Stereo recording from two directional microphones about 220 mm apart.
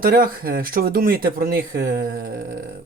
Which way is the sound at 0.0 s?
40° right (ahead or behind).